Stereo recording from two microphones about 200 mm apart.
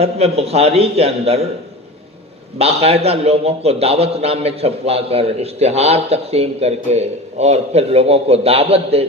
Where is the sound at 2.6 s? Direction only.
30° right (ahead or behind).